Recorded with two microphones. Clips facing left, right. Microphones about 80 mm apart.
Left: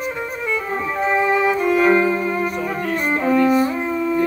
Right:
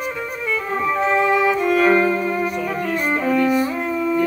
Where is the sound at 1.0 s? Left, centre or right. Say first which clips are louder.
Left 1 dB; centre.